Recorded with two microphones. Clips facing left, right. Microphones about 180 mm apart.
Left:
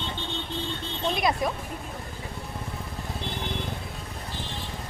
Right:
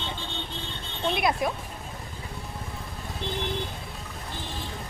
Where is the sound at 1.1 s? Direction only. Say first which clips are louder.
Even; 5° right (ahead or behind).